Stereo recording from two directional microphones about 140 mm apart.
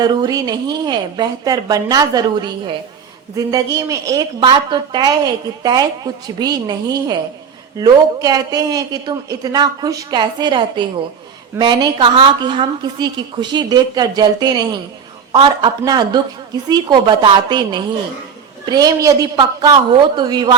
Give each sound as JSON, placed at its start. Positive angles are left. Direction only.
{"t": 0.0, "sound": "a woman's voice", "side_deg": -30}